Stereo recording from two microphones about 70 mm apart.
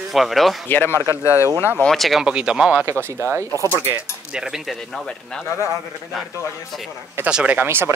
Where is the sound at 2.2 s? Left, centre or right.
Centre.